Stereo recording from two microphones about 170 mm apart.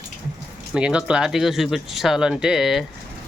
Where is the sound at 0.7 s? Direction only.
5° right (ahead or behind).